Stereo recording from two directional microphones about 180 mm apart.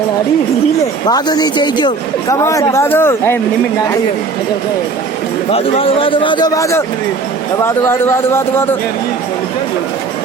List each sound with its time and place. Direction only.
1.0 s a man's voice: 20° left (ahead or behind)
5.5 s a man's voice: 30° left (ahead or behind); by 8.6 s 15° left (ahead or behind)